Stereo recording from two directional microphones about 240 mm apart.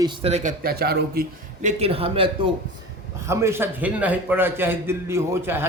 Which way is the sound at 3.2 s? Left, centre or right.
Centre.